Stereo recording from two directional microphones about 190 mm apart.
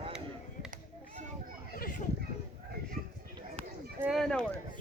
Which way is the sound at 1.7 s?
45° left (ahead or behind).